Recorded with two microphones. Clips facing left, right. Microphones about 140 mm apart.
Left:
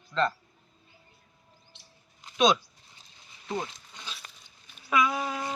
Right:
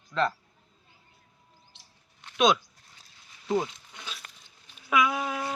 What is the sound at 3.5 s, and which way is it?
Zipper, 10° right (ahead or behind).